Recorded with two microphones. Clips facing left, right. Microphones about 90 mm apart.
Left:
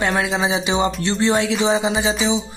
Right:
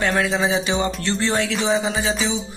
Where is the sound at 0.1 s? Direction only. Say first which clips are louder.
Even; 15° left (ahead or behind).